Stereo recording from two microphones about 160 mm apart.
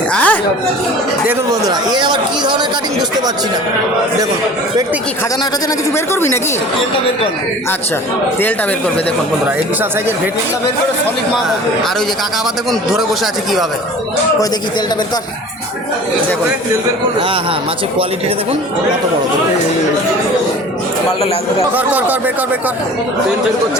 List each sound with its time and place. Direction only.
0.1 s chatter: 10° left (ahead or behind)
1.6 s speech: 30° right (ahead or behind)
21.8 s speech: 10° right (ahead or behind)